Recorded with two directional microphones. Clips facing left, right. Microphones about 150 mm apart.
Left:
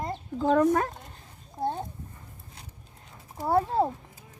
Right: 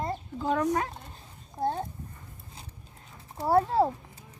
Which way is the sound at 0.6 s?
45° left (ahead or behind).